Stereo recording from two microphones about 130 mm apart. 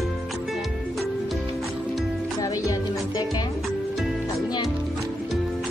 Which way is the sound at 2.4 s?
30° left (ahead or behind).